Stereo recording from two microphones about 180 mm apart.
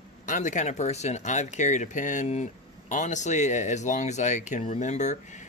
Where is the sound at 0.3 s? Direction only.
45° left (ahead or behind).